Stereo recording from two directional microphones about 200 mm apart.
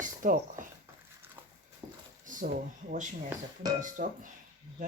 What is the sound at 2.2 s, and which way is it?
Speech, 40° right (ahead or behind).